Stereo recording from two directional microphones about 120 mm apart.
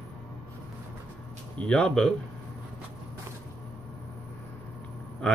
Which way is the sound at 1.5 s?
5° left (ahead or behind).